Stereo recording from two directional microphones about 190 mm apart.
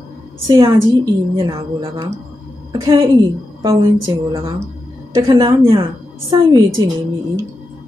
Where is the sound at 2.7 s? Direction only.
20° right (ahead or behind).